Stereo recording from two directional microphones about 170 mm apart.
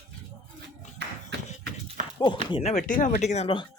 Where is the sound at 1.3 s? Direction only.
90° right.